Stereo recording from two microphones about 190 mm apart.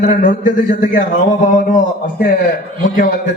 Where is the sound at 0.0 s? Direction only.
45° left (ahead or behind).